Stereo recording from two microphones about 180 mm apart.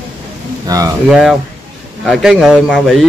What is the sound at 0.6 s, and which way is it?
Speech, 20° right (ahead or behind).